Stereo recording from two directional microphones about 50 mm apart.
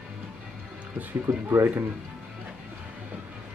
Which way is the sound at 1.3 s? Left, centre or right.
Right.